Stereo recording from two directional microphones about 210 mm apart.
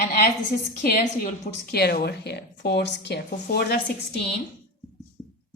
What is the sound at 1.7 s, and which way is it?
Speech, 50° left (ahead or behind).